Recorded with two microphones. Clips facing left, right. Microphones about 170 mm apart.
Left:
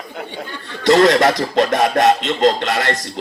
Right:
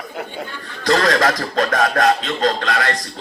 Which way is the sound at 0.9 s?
20° left (ahead or behind).